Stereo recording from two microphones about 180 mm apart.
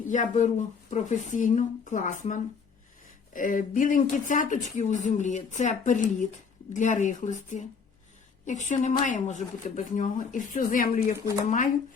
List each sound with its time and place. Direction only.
0.1 s speech: 45° left (ahead or behind)